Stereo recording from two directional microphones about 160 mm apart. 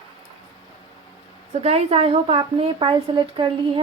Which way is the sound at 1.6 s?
40° right (ahead or behind).